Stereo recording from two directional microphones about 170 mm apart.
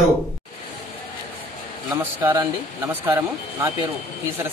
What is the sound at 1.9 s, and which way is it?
A man's voice, 15° right (ahead or behind).